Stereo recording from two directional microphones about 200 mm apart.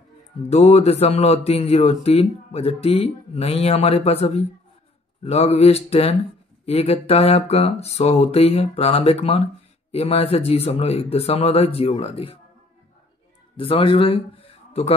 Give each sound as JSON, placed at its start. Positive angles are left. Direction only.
{"t": 0.4, "sound": "speech", "side_deg": 30}
{"t": 13.6, "sound": "speech", "side_deg": 30}